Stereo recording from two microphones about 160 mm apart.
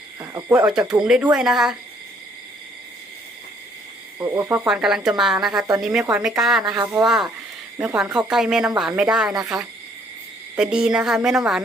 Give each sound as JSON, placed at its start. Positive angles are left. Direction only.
{"t": 0.2, "sound": "speech", "side_deg": -15}
{"t": 0.7, "sound": "speech", "side_deg": -5}
{"t": 4.2, "sound": "speech", "side_deg": -15}
{"t": 4.7, "sound": "speech", "side_deg": -5}
{"t": 6.7, "sound": "speech", "side_deg": -20}
{"t": 7.0, "sound": "speech", "side_deg": 0}